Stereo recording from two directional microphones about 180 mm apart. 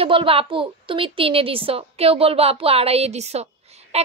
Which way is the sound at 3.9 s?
35° right (ahead or behind).